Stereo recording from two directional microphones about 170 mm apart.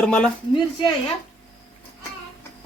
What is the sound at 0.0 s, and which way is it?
Speech, 5° left (ahead or behind).